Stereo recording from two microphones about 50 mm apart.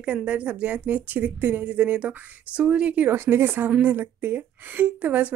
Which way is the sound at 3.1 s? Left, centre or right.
Right.